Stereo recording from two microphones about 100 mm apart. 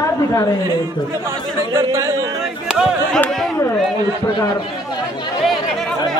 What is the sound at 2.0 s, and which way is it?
Speech, 35° right (ahead or behind).